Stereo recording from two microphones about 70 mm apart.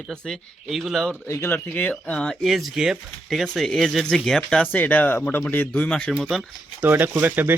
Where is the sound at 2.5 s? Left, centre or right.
Centre.